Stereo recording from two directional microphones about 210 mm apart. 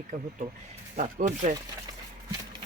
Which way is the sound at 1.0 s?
35° right (ahead or behind).